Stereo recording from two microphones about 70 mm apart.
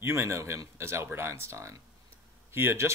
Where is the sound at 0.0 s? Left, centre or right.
Right.